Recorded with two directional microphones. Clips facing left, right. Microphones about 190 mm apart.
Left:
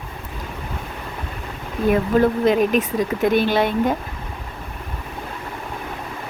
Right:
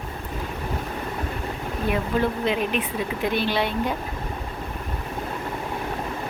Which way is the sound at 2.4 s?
40° left (ahead or behind).